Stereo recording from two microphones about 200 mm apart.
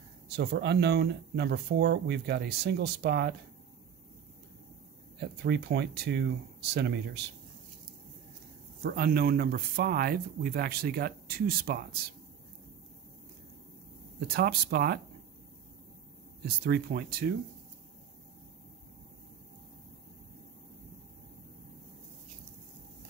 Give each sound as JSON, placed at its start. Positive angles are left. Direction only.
{"t": 0.4, "sound": "speech", "side_deg": -55}
{"t": 5.4, "sound": "speech", "side_deg": -55}
{"t": 8.8, "sound": "speech", "side_deg": -50}
{"t": 14.2, "sound": "speech", "side_deg": -50}
{"t": 16.4, "sound": "speech", "side_deg": -50}